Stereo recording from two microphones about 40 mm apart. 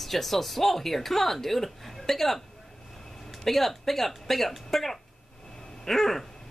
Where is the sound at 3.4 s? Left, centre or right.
Centre.